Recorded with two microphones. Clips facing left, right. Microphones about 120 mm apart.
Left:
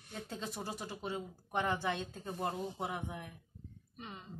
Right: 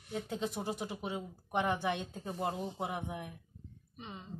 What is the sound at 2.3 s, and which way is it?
Speech, 10° right (ahead or behind).